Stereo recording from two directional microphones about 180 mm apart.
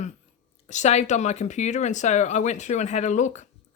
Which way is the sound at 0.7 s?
40° left (ahead or behind).